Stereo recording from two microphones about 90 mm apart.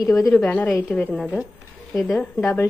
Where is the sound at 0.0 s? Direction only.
40° left (ahead or behind).